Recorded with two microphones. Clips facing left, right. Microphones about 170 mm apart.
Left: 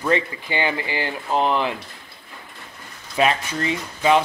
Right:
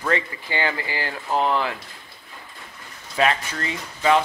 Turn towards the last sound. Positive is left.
turn(degrees=20)  # may be behind; listen again after turning